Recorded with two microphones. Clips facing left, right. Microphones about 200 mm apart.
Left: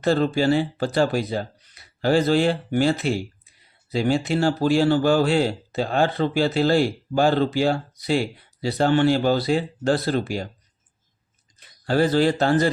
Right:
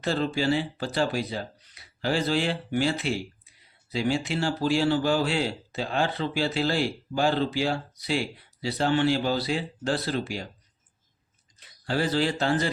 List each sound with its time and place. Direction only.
0.0 s a man's voice: 50° left (ahead or behind)
11.9 s a man's voice: 50° left (ahead or behind)